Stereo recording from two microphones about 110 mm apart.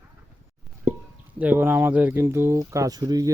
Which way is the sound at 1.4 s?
15° right (ahead or behind).